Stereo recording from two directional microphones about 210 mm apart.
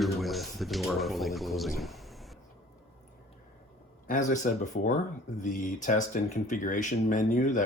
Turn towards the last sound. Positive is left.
turn(degrees=40)  # may be behind; listen again after turning